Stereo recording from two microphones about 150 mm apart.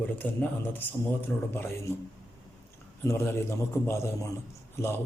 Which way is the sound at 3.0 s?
20° left (ahead or behind).